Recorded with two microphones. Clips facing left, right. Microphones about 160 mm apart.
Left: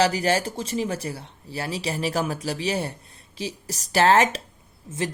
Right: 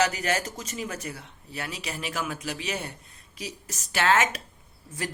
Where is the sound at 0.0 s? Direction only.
30° left (ahead or behind).